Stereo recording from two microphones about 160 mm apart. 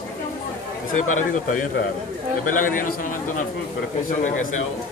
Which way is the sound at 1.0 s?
55° left (ahead or behind).